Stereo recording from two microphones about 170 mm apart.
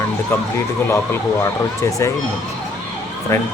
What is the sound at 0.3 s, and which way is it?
Speech, 15° left (ahead or behind).